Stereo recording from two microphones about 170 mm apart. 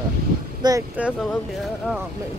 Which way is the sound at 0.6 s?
25° right (ahead or behind).